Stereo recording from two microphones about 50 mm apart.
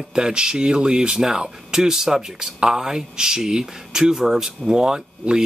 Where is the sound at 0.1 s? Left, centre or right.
Centre.